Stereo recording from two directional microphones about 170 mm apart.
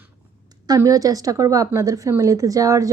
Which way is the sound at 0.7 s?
20° right (ahead or behind).